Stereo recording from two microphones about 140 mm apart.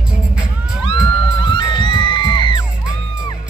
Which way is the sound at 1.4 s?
35° left (ahead or behind).